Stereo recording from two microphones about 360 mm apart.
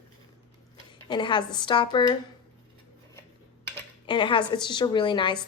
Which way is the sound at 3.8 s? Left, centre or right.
Centre.